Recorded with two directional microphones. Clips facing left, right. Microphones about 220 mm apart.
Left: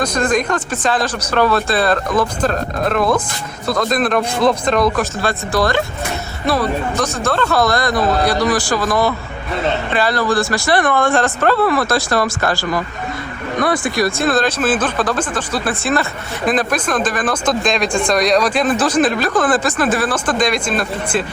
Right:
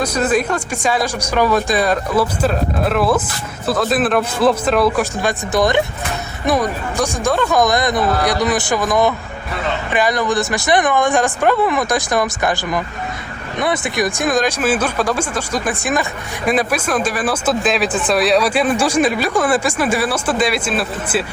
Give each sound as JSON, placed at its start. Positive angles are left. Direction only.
{"t": 0.0, "sound": "a man's voice", "side_deg": -5}